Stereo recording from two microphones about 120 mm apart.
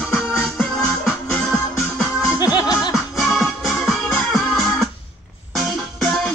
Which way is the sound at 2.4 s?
35° left (ahead or behind).